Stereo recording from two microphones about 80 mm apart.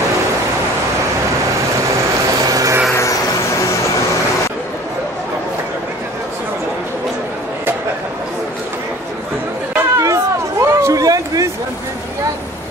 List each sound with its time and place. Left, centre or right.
2.4 s vehicle: right
2.9 s vehicle: left
9.8 s a sound: right